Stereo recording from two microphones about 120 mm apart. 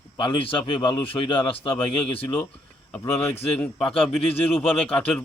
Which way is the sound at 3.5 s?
10° left (ahead or behind).